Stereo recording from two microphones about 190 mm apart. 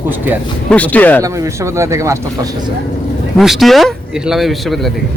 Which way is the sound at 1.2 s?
15° right (ahead or behind).